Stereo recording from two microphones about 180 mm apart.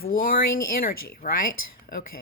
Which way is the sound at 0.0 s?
50° left (ahead or behind).